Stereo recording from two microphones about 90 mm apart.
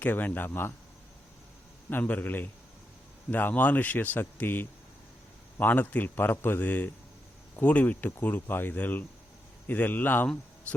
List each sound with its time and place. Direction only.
0.0 s speech: 20° left (ahead or behind)
1.9 s speech: 20° left (ahead or behind)